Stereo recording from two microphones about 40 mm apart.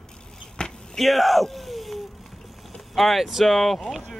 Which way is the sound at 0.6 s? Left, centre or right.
Left.